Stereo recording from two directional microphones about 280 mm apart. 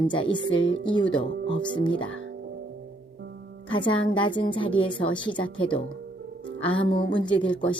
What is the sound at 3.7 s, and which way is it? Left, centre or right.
A woman's voice, centre.